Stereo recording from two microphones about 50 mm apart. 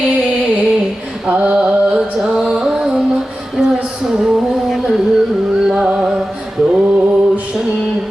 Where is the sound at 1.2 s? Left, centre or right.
Right.